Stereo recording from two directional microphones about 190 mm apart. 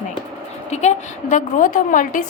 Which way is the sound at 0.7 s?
35° left (ahead or behind).